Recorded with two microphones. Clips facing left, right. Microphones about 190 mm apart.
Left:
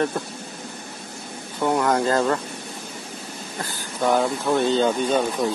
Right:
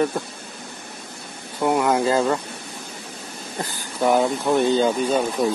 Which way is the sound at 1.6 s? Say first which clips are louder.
Right 1 dB; 5° right (ahead or behind).